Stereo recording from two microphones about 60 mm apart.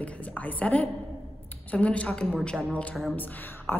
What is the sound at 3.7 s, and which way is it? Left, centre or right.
Speech, left.